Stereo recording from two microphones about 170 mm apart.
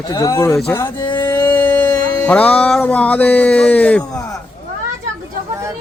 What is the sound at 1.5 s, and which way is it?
Music, 10° left (ahead or behind).